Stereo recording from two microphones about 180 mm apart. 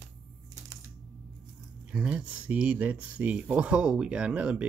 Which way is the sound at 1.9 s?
5° right (ahead or behind).